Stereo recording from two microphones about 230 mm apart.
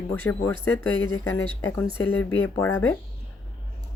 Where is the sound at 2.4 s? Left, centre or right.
Centre.